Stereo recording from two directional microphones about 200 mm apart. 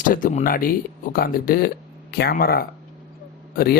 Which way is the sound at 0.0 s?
45° left (ahead or behind).